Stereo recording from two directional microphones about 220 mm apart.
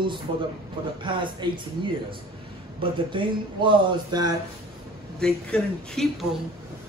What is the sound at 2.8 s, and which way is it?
Speech, 20° right (ahead or behind).